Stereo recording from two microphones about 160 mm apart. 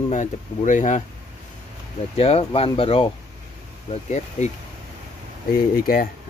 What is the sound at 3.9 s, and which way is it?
Speech, 45° left (ahead or behind).